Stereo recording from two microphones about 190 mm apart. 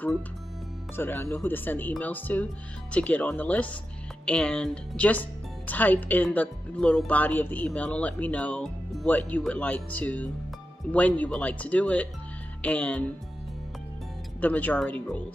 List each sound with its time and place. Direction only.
0.9 s speech: 10° left (ahead or behind)
14.4 s speech: 10° left (ahead or behind)